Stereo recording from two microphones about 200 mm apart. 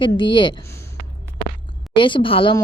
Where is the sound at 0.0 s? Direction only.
25° left (ahead or behind).